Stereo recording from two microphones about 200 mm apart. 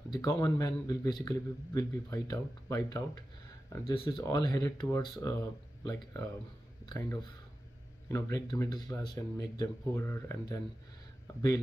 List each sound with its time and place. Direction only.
0.1 s a man's voice: 20° left (ahead or behind)
6.9 s speech: 15° left (ahead or behind)